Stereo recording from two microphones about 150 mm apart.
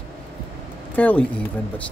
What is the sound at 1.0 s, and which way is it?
Speech, 10° left (ahead or behind).